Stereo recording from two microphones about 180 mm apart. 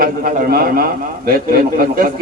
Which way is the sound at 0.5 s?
55° right (ahead or behind).